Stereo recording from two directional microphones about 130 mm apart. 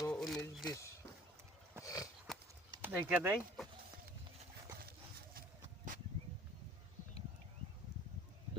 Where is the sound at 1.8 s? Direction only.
25° left (ahead or behind).